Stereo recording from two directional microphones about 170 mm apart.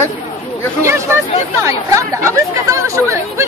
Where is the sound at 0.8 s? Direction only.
15° right (ahead or behind).